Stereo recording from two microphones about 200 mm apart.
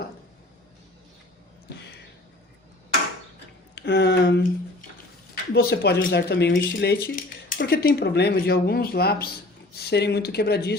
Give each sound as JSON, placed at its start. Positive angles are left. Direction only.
{"t": 3.8, "sound": "speech", "side_deg": 60}